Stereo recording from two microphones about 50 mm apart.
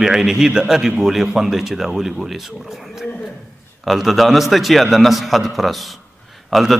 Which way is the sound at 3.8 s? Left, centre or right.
Centre.